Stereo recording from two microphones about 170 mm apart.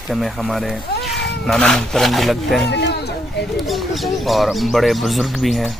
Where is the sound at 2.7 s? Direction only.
80° left.